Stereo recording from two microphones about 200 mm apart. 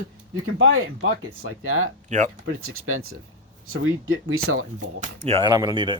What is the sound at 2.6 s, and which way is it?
Speech, 90° right.